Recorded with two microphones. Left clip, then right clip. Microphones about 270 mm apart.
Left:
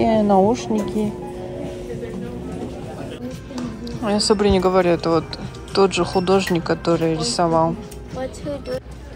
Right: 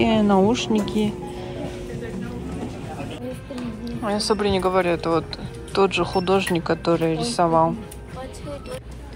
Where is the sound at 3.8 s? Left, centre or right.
Centre.